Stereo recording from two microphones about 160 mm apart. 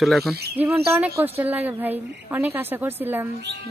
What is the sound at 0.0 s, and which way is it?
Speech, centre (ahead or behind).